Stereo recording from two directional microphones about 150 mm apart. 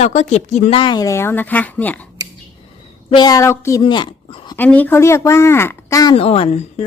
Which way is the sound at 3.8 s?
35° left (ahead or behind).